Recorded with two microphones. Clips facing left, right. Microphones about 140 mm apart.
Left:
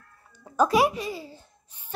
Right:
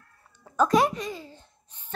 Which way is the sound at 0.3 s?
10° left (ahead or behind).